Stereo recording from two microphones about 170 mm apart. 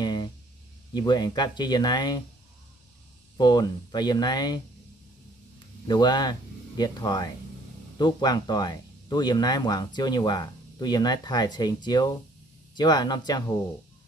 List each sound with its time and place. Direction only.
0.0 s a sound: 25° left (ahead or behind)
0.9 s speech: 25° left (ahead or behind)
3.3 s speech: 25° left (ahead or behind)
5.9 s speech: 25° left (ahead or behind)